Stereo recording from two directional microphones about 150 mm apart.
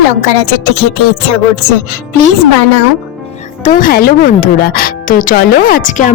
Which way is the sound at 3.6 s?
65° left (ahead or behind).